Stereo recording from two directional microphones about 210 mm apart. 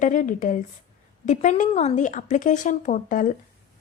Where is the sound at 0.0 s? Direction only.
40° left (ahead or behind).